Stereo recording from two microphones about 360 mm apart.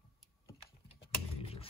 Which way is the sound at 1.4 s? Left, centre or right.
Centre.